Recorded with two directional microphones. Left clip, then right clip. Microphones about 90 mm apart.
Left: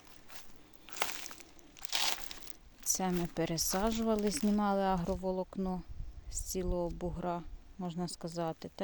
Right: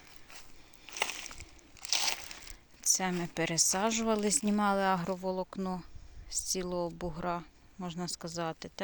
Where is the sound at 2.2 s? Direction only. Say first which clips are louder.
Right 2 dB; 25° right (ahead or behind).